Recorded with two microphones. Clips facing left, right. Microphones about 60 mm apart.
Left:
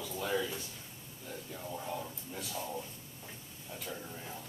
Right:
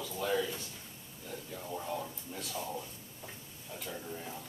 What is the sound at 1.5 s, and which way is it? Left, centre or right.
Speech, centre.